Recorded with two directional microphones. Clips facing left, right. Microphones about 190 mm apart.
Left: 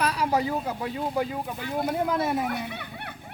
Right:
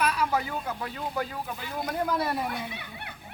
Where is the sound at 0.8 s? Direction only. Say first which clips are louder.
Left 5 dB; 20° left (ahead or behind).